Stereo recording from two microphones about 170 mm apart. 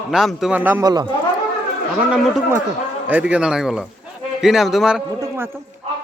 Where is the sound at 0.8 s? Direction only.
25° right (ahead or behind).